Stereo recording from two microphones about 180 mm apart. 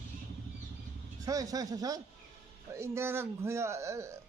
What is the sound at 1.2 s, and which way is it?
Speech, 20° right (ahead or behind).